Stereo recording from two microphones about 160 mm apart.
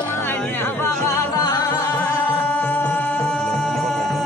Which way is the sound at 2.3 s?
10° left (ahead or behind).